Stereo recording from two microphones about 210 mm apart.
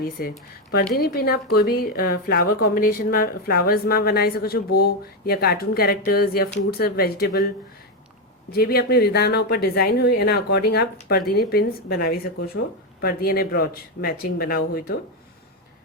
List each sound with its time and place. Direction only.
0.0 s a woman's voice: 45° left (ahead or behind)
8.5 s a woman's voice: 45° left (ahead or behind)